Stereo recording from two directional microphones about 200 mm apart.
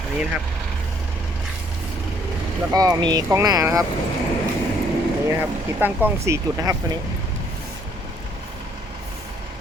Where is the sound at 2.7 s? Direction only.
20° right (ahead or behind).